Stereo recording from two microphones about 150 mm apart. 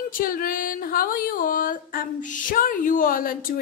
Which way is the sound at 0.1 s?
70° left (ahead or behind).